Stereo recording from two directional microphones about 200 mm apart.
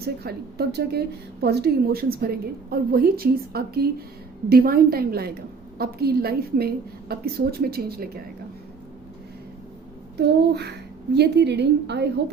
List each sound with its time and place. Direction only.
0.0 s a woman's voice: 50° right (ahead or behind)
10.2 s a woman's voice: 55° right (ahead or behind)